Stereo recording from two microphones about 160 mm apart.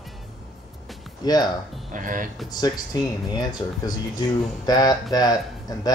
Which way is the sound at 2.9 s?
25° left (ahead or behind).